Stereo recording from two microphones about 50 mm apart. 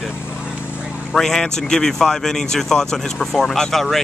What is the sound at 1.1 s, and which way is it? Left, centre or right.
Speech, centre.